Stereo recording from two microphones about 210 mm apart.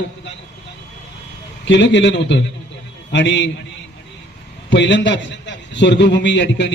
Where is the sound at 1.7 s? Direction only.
55° left (ahead or behind).